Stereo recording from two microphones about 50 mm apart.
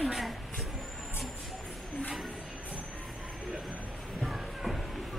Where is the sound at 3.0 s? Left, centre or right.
Centre.